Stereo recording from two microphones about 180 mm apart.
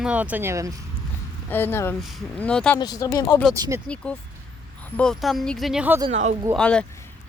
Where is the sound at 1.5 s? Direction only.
10° left (ahead or behind).